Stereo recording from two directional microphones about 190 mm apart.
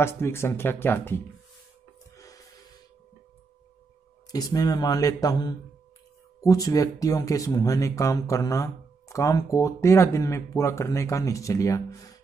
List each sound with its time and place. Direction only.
0.0 s speech: 15° left (ahead or behind)
2.1 s music: 20° left (ahead or behind)
4.3 s speech: 20° left (ahead or behind)